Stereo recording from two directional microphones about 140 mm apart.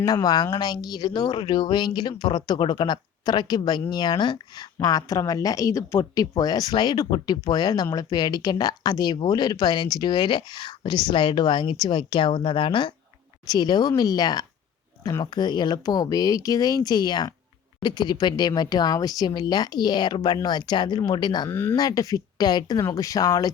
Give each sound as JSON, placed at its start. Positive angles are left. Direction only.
{"t": 0.0, "sound": "speech", "side_deg": 25}
{"t": 21.5, "sound": "speech", "side_deg": 15}
{"t": 21.8, "sound": "speech", "side_deg": 25}